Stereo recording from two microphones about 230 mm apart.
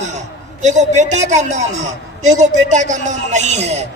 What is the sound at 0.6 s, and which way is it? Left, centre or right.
A man's voice, right.